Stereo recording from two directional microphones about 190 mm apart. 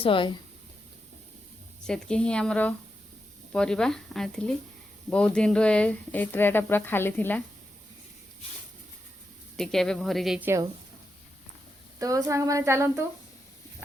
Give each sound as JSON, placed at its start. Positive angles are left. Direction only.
{"t": 0.0, "sound": "speech", "side_deg": 25}
{"t": 1.9, "sound": "speech", "side_deg": 5}
{"t": 9.6, "sound": "speech", "side_deg": 0}
{"t": 11.9, "sound": "speech", "side_deg": -15}